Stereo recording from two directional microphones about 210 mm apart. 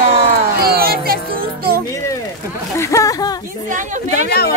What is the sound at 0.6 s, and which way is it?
Music, 45° right (ahead or behind).